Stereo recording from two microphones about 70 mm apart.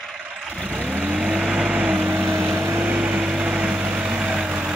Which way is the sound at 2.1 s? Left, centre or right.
Right.